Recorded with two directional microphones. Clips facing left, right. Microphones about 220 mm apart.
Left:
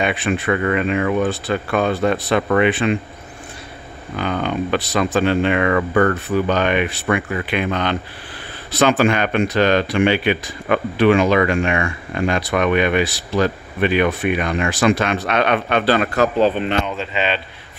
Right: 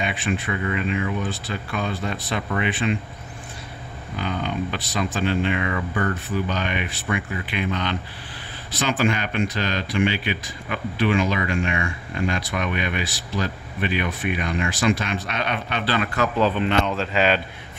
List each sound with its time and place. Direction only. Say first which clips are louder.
0.0 s speech: left 6 dB; 70° left (ahead or behind)
4.2 s speech: left 5 dB; 65° left (ahead or behind)
8.7 s speech: left 7 dB; 65° left (ahead or behind)
15.8 s speech: left 5 dB; 45° left (ahead or behind)
16.3 s speech: left 3 dB; 25° left (ahead or behind)
16.8 s speech: right 1 dB; centre (ahead or behind)